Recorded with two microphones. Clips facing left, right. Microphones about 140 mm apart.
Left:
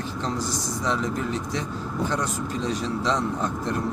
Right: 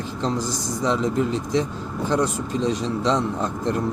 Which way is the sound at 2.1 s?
Centre (ahead or behind).